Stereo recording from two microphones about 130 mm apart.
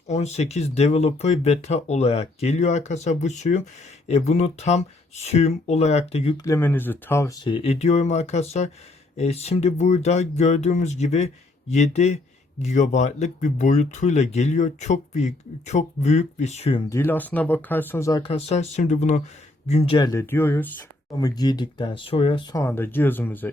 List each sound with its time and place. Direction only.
0.1 s speech: 60° left (ahead or behind)
6.3 s speech: 25° left (ahead or behind)
7.4 s speech: 45° left (ahead or behind)
16.9 s speech: 15° left (ahead or behind)
18.2 s speech: 50° left (ahead or behind); by 19.2 s 65° left (ahead or behind)
19.6 s speech: 50° left (ahead or behind)
20.1 s speech: 20° left (ahead or behind)
21.2 s speech: 30° left (ahead or behind)
22.5 s speech: 20° left (ahead or behind)